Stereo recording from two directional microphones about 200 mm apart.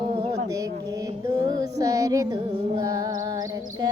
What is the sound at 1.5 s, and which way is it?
Child singing, 20° right (ahead or behind).